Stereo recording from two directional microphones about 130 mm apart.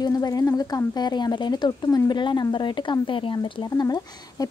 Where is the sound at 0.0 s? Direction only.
30° left (ahead or behind).